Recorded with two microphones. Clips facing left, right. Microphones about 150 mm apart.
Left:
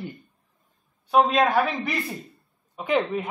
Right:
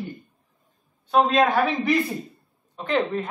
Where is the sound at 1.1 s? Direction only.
5° left (ahead or behind).